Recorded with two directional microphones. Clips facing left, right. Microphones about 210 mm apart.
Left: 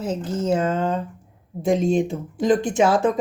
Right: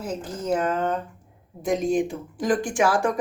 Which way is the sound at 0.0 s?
25° left (ahead or behind).